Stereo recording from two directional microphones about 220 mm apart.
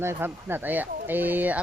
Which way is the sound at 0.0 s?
10° right (ahead or behind).